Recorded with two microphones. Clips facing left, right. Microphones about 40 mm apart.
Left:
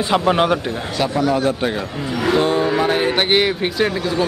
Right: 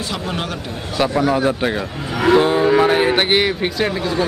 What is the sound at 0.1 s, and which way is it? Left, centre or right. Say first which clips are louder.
Speech: left 12 dB; left.